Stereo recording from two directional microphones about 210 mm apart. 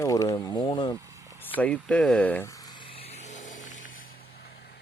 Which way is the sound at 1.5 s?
5° left (ahead or behind).